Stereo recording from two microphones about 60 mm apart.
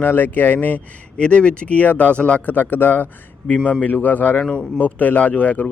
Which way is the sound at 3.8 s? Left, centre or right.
Left.